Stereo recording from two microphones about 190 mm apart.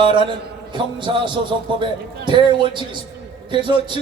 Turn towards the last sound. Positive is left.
turn(degrees=-25)  # may be behind; listen again after turning